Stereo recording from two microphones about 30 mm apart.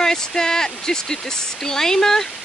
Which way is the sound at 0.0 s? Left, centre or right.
Centre.